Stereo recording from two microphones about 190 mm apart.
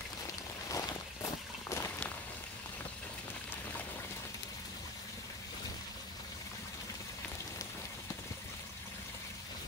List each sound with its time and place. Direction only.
0.7 s walk: 15° left (ahead or behind)